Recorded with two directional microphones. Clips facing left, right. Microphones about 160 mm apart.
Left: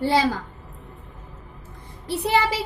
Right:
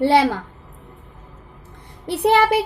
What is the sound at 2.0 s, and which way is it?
Speech, 60° right (ahead or behind).